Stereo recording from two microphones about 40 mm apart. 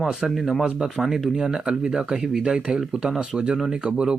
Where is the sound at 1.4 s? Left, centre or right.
Centre.